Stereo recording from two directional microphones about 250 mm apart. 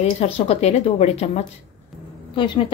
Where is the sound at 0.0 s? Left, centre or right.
Left.